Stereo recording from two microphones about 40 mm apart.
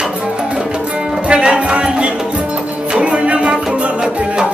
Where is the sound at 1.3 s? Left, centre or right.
Right.